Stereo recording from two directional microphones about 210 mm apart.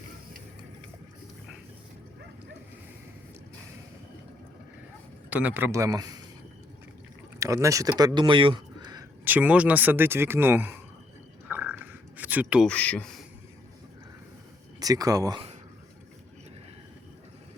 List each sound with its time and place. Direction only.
5.3 s speech: 10° right (ahead or behind)
7.3 s speech: 15° right (ahead or behind)
9.2 s speech: 5° right (ahead or behind)
11.4 s a sound: 5° right (ahead or behind)
12.6 s speech: 5° left (ahead or behind)
14.8 s speech: 15° right (ahead or behind)